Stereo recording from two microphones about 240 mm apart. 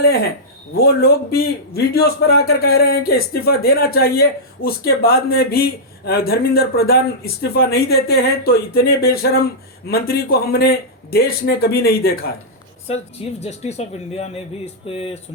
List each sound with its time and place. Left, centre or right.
0.8 s a man's voice: left
12.9 s speech: left